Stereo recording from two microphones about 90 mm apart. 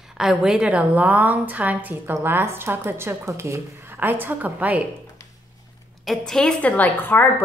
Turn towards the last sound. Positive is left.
turn(degrees=20)  # may be behind; listen again after turning